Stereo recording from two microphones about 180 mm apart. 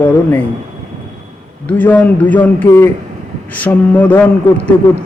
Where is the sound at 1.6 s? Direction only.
10° left (ahead or behind).